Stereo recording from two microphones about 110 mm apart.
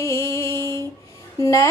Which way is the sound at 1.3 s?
30° left (ahead or behind).